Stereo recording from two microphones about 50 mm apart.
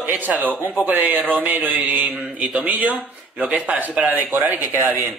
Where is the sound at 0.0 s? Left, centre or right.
Right.